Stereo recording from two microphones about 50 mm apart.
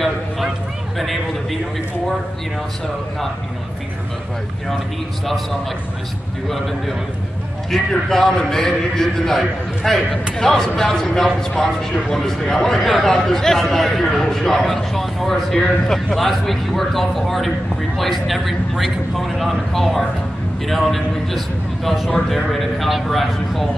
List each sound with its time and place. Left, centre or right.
0.9 s a man's voice: centre
5.2 s a man's voice: centre
7.7 s a man's voice: centre
15.6 s speech: centre
16.2 s a man's voice: centre